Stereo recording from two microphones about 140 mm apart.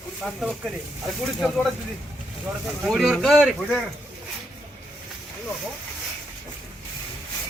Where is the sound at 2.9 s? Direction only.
Centre (ahead or behind).